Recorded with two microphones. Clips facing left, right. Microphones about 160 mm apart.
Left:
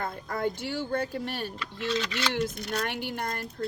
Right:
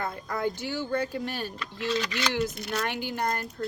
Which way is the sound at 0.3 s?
55° left (ahead or behind).